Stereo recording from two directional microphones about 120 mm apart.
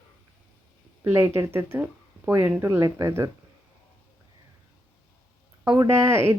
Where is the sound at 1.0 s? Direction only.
20° right (ahead or behind).